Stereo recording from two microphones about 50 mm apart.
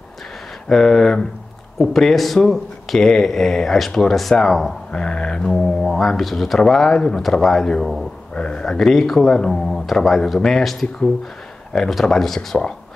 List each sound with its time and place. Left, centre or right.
0.7 s speech: centre
4.9 s speech: centre